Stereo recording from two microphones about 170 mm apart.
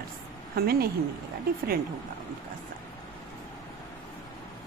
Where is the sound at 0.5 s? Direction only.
65° right (ahead or behind).